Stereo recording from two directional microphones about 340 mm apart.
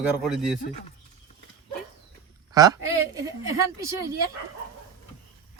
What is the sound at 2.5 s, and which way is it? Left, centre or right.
Speech, centre.